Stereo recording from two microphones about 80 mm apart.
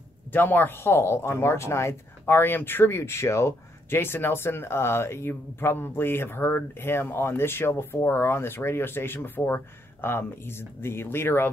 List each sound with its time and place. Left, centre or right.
0.3 s speech: left